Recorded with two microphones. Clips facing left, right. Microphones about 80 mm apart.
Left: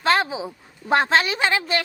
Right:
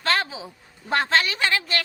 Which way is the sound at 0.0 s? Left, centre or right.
Centre.